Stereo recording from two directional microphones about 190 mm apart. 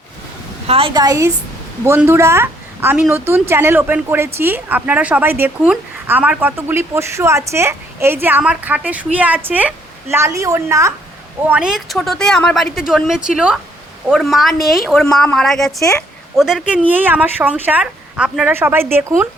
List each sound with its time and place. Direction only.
0.7 s a woman's voice: 25° right (ahead or behind)
11.4 s a woman's voice: 5° right (ahead or behind)